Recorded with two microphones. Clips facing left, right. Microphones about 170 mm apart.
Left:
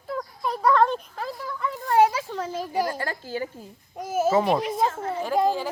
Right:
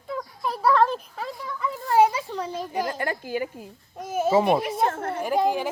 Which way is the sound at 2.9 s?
20° right (ahead or behind).